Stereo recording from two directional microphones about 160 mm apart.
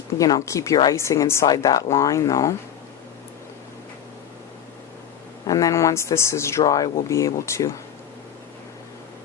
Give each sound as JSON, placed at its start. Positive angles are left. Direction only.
{"t": 0.2, "sound": "a woman's voice", "side_deg": 20}
{"t": 5.5, "sound": "a woman's voice", "side_deg": 20}